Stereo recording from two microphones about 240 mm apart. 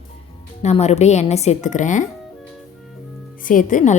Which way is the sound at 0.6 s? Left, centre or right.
Left.